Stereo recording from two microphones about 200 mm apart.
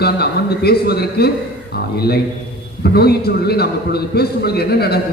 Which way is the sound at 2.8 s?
50° left (ahead or behind).